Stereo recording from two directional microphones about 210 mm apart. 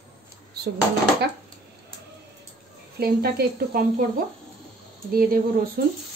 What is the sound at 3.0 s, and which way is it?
A woman's voice, 50° right (ahead or behind).